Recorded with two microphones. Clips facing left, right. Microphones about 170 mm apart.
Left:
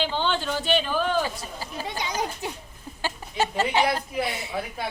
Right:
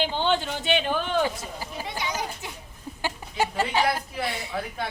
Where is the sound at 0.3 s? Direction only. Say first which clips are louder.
Left 2 dB; 20° right (ahead or behind).